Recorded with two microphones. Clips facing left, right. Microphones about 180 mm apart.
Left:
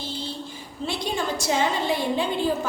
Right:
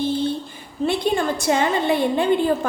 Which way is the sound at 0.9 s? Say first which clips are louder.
Right 7 dB; 55° right (ahead or behind).